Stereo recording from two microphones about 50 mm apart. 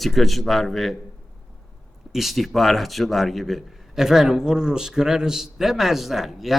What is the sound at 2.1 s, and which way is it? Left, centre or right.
A man's voice, centre.